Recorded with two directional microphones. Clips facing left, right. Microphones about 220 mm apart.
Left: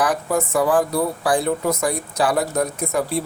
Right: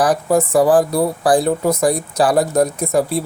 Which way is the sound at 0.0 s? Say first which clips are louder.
Right 5 dB; 35° right (ahead or behind).